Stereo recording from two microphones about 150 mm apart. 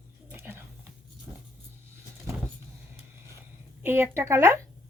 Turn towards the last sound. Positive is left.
turn(degrees=-15)  # may be behind; listen again after turning